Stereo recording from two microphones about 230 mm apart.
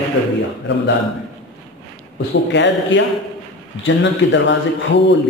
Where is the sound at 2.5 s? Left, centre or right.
Left.